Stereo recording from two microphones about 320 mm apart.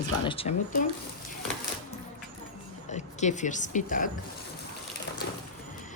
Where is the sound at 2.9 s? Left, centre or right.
Left.